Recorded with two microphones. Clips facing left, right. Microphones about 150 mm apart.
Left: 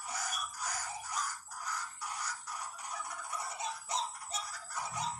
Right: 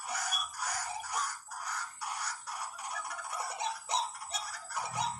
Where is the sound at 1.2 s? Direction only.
65° right (ahead or behind).